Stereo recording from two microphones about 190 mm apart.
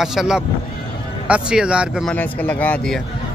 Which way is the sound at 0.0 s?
5° right (ahead or behind).